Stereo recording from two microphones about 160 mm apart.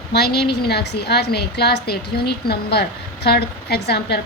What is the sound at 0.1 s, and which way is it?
A woman's voice, 90° left.